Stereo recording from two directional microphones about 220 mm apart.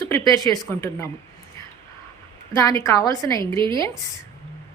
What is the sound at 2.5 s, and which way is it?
Speech, 15° left (ahead or behind).